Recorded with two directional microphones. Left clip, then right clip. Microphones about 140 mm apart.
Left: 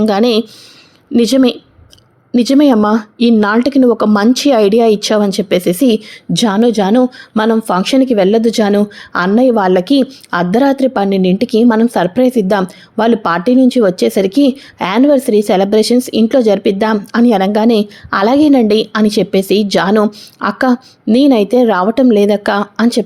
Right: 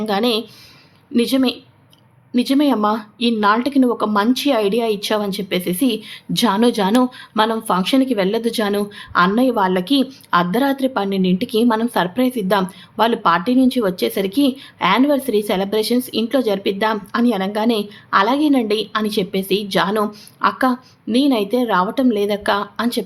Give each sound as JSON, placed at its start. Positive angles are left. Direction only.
{"t": 0.0, "sound": "speech", "side_deg": 55}
{"t": 6.3, "sound": "a woman's voice", "side_deg": 25}